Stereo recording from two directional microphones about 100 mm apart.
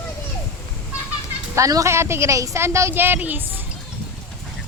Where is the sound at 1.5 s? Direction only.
35° right (ahead or behind).